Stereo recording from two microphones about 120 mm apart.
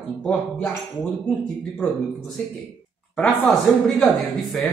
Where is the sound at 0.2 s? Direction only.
5° left (ahead or behind).